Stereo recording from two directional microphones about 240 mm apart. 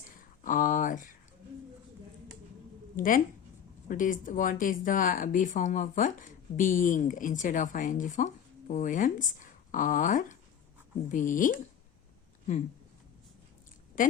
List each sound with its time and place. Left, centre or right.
0.2 s speech: left
2.9 s speech: left
14.0 s speech: left